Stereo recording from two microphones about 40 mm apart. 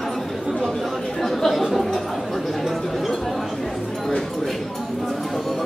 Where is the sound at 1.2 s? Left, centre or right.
Centre.